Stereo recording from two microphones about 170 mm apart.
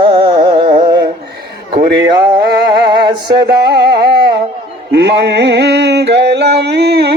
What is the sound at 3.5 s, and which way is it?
Carnatic music, 80° right.